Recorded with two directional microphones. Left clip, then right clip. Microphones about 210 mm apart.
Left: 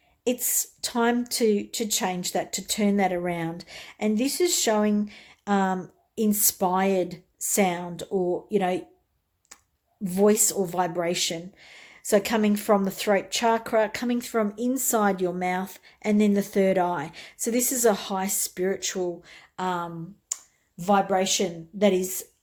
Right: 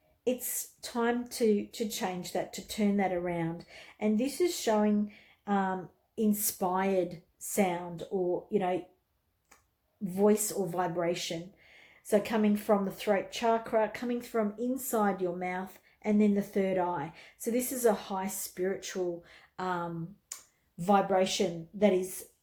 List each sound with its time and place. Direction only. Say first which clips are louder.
0.8 s speech: left 6 dB; 35° left (ahead or behind)
10.0 s speech: left 6 dB; 40° left (ahead or behind)
20.3 s a sound: left 15 dB; 25° left (ahead or behind)
20.8 s speech: left 4 dB; 20° left (ahead or behind)